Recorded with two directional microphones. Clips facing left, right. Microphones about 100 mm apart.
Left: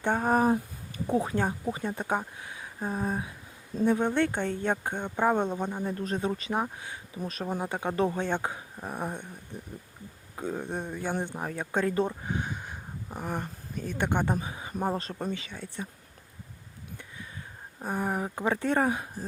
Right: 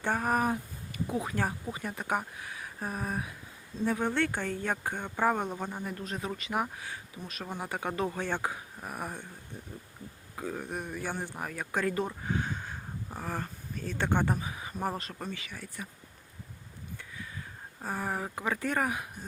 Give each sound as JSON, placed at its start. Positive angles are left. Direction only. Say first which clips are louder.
{"t": 0.0, "sound": "speech", "louder": "left 4 dB", "side_deg": 25}
{"t": 5.9, "sound": "speech", "louder": "left 6 dB", "side_deg": 35}
{"t": 7.2, "sound": "speech", "louder": "left 10 dB", "side_deg": 35}
{"t": 7.6, "sound": "speech", "louder": "left 4 dB", "side_deg": 20}
{"t": 10.3, "sound": "speech", "louder": "left 3 dB", "side_deg": 20}
{"t": 14.3, "sound": "speech", "louder": "left 4 dB", "side_deg": 30}
{"t": 17.8, "sound": "speech", "louder": "left 4 dB", "side_deg": 20}